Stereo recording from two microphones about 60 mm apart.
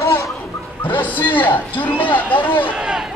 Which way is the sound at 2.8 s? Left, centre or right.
Centre.